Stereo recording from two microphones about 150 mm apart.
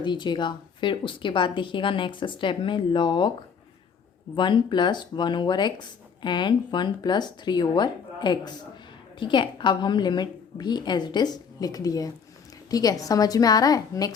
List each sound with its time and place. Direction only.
0.0 s speech: 30° left (ahead or behind)
4.4 s a woman's voice: 30° left (ahead or behind)